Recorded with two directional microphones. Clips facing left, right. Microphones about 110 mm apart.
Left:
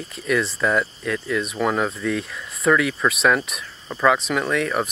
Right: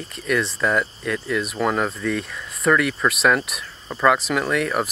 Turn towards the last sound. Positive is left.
turn(degrees=0)  # may be behind; listen again after turning